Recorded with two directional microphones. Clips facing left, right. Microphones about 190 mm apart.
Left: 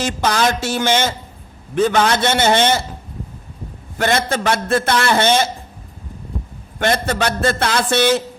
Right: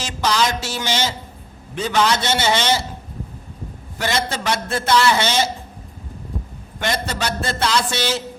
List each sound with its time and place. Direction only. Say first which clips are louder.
0.0 s a man's voice: left 3 dB; 55° left (ahead or behind)
3.9 s a man's voice: left 5 dB; 55° left (ahead or behind)
6.7 s a man's voice: left 6 dB; 55° left (ahead or behind)